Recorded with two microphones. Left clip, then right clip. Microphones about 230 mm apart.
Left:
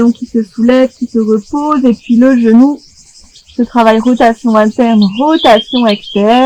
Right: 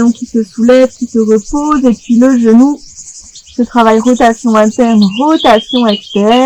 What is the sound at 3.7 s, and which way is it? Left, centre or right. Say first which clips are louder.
Speech: even; right.